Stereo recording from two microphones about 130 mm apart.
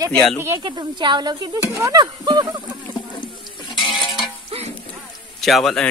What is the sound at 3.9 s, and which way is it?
Music, 35° left (ahead or behind).